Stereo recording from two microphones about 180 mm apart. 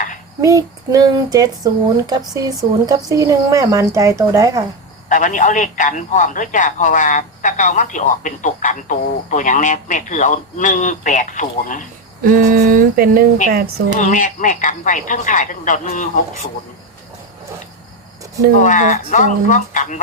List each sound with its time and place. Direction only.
0.4 s speech: 20° right (ahead or behind)
5.0 s a man's voice: 45° left (ahead or behind)
12.2 s speech: 50° right (ahead or behind)
14.0 s a man's voice: 45° left (ahead or behind)
18.6 s a man's voice: 45° left (ahead or behind)